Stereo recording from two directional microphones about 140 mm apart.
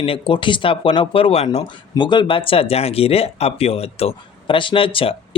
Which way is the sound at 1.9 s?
35° left (ahead or behind).